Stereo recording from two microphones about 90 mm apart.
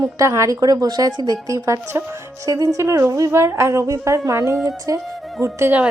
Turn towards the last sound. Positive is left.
turn(degrees=-30)  # may be behind; listen again after turning